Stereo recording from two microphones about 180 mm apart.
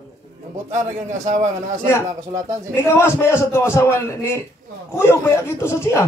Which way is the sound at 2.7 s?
15° left (ahead or behind).